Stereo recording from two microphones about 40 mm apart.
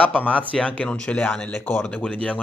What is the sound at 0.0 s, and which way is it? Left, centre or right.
Speech, left.